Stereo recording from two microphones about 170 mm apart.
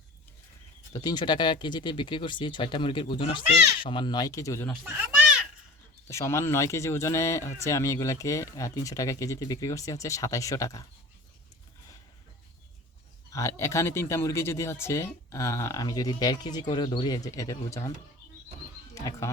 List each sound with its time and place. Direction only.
0.9 s speech: 25° left (ahead or behind)
4.8 s speech: 10° right (ahead or behind)
6.1 s speech: 15° left (ahead or behind)
13.3 s speech: 15° left (ahead or behind)
18.9 s speech: 20° left (ahead or behind)